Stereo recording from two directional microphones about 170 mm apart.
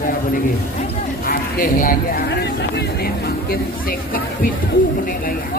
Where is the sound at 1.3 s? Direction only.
60° left (ahead or behind).